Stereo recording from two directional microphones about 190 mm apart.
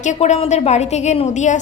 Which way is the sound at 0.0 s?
40° left (ahead or behind).